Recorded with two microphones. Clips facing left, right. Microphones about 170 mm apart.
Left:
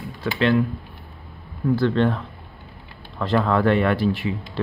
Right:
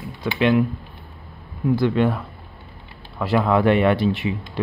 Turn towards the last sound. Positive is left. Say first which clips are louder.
# right 2 dB
turn(degrees=-20)  # may be behind; listen again after turning